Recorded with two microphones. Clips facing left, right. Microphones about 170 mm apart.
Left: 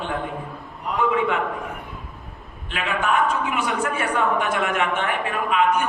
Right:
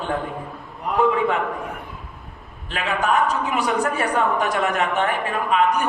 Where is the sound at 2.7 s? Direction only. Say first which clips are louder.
Right 2 dB; 40° right (ahead or behind).